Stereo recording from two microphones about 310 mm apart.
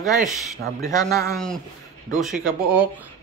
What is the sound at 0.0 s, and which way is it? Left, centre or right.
A man's voice, centre.